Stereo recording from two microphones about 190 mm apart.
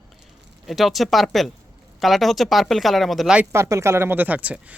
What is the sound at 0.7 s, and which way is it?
A woman's voice, centre (ahead or behind).